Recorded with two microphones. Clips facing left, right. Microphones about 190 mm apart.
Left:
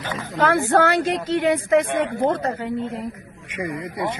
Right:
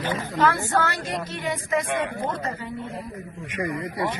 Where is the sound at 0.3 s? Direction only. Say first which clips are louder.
Left 5 dB; 70° left (ahead or behind).